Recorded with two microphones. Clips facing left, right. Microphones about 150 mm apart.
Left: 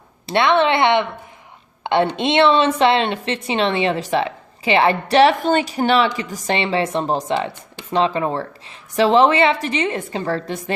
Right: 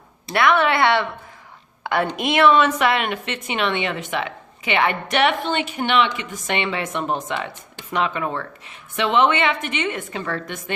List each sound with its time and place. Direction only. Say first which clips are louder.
0.3 s a woman's voice: left 2 dB; 25° left (ahead or behind)